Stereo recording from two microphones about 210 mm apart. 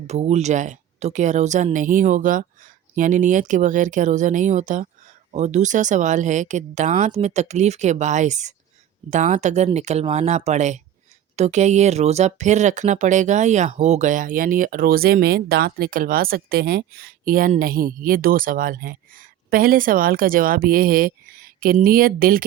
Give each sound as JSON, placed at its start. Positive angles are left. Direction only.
{"t": 0.1, "sound": "speech", "side_deg": -30}